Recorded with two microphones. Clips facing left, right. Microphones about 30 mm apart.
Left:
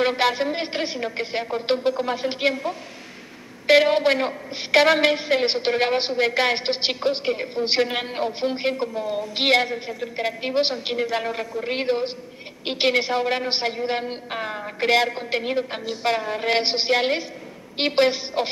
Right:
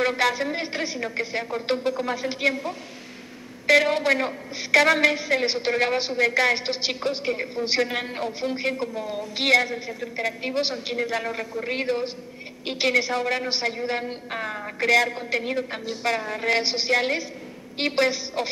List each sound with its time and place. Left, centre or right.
0.0 s a woman's voice: left
3.6 s a woman's voice: left
8.8 s a woman's voice: centre
9.3 s a woman's voice: left